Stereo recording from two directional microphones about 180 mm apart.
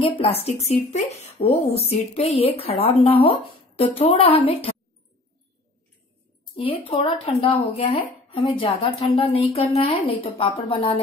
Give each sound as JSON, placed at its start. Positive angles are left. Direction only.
{"t": 0.2, "sound": "speech", "side_deg": 35}
{"t": 6.5, "sound": "a woman's voice", "side_deg": 30}